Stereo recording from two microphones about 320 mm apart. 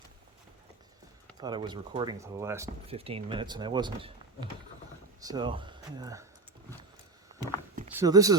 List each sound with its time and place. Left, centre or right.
1.4 s speech: centre
7.9 s speech: centre